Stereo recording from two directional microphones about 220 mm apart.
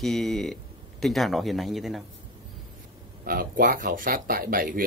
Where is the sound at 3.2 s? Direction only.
40° right (ahead or behind).